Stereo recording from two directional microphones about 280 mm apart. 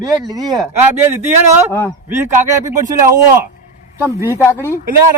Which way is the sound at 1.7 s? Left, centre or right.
Centre.